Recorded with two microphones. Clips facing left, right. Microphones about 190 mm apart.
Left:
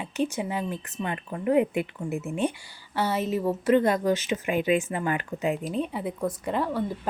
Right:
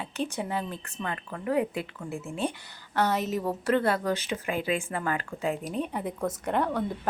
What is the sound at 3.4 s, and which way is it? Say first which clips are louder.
Speech: left 5 dB; 15° left (ahead or behind).